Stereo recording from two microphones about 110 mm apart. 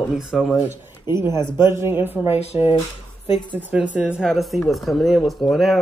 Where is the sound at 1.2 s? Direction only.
40° left (ahead or behind).